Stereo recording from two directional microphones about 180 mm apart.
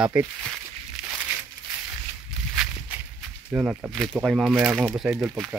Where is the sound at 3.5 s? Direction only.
10° right (ahead or behind).